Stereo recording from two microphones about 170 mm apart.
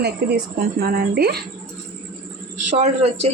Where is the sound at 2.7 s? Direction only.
40° right (ahead or behind).